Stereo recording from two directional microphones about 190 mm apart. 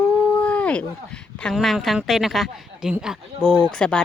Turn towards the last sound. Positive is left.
turn(degrees=5)  # may be behind; listen again after turning